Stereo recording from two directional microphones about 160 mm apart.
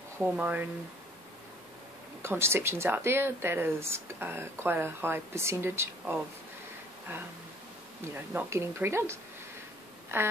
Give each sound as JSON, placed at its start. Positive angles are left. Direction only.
{"t": 0.2, "sound": "speech", "side_deg": -10}
{"t": 2.2, "sound": "speech", "side_deg": -15}
{"t": 8.1, "sound": "speech", "side_deg": -10}